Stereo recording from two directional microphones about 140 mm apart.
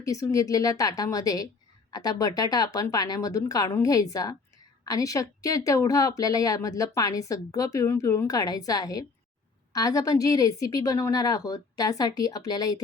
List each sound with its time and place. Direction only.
0.0 s speech: 25° left (ahead or behind)